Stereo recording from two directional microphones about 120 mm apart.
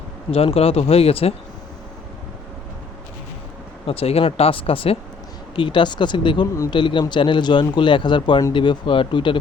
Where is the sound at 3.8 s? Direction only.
55° left (ahead or behind).